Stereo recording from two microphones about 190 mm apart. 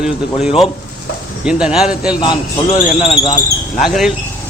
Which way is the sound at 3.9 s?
Centre (ahead or behind).